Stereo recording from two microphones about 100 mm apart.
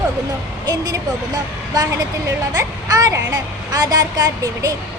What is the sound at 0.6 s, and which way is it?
Speech, 40° right (ahead or behind).